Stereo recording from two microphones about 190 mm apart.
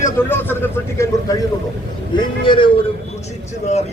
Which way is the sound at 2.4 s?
25° left (ahead or behind).